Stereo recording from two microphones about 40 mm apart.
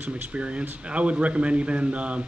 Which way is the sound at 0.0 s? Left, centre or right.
Right.